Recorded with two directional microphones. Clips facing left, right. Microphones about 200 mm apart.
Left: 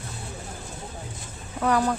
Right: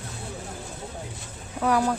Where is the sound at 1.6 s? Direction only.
5° right (ahead or behind).